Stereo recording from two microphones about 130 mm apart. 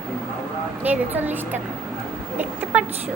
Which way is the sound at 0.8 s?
15° right (ahead or behind).